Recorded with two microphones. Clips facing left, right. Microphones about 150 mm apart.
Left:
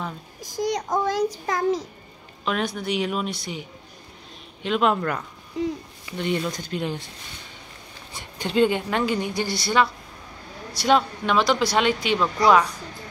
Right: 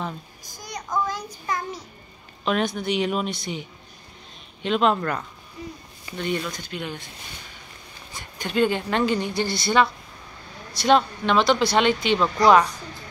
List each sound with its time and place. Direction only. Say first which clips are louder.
0.6 s a child's voice: left 4 dB; 90° left
2.4 s speech: right 2 dB; centre (ahead or behind)
4.6 s speech: right 1 dB; 5° left (ahead or behind)
5.5 s a sound: left 11 dB; 90° left
6.1 s speech: left 2 dB; 25° left (ahead or behind)
6.5 s speech: left 4 dB; 40° left (ahead or behind)
8.1 s speech: left 2 dB; 30° left (ahead or behind)
8.6 s speech: even; 10° left (ahead or behind)